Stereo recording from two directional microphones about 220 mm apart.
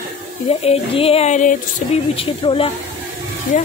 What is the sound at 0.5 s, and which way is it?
Speech, 25° left (ahead or behind).